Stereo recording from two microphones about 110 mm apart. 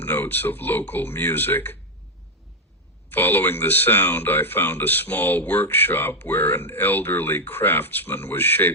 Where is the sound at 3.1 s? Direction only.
20° left (ahead or behind).